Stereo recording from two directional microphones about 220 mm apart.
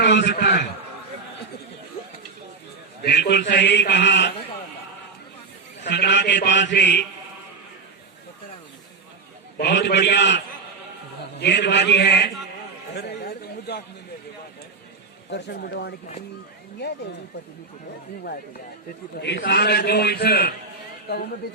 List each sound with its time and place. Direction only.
0.0 s a man's voice: 50° left (ahead or behind)
3.0 s a man's voice: 50° left (ahead or behind)
5.8 s a man's voice: 50° left (ahead or behind)
9.6 s a man's voice: 50° left (ahead or behind)
12.9 s a sound: 50° left (ahead or behind)
15.3 s a man's voice: 50° left (ahead or behind)
19.2 s a man's voice: 50° left (ahead or behind)